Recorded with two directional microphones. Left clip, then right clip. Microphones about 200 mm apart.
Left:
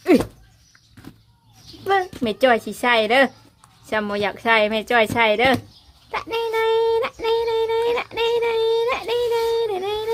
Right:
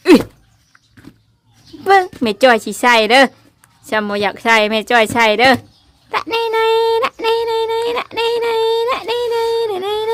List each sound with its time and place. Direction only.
1.8 s a woman's voice: 35° right (ahead or behind)
6.1 s child singing: 30° right (ahead or behind)